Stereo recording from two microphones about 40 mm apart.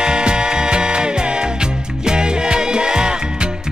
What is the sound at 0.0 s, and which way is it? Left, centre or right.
Music, right.